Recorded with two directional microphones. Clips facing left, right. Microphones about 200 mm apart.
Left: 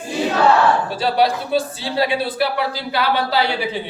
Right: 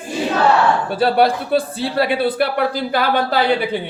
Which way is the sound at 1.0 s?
55° right (ahead or behind).